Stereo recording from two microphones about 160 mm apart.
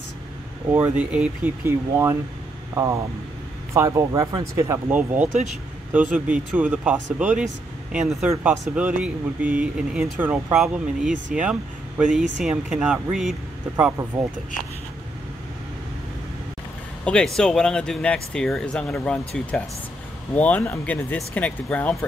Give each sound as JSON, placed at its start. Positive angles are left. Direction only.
{"t": 0.7, "sound": "a man's voice", "side_deg": -10}
{"t": 8.5, "sound": "speech", "side_deg": -5}
{"t": 17.0, "sound": "speech", "side_deg": 5}